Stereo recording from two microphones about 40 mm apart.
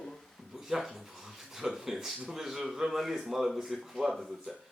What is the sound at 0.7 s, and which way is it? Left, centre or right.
Speech, centre.